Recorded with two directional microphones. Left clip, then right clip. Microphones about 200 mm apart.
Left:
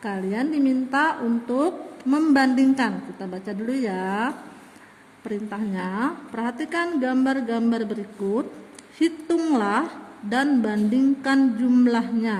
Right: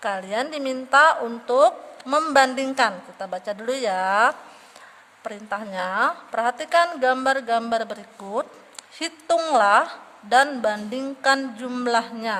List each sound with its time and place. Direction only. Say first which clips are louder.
0.0 s a woman's voice: right 2 dB; 35° right (ahead or behind)
9.0 s a woman's voice: right 1 dB; 35° right (ahead or behind)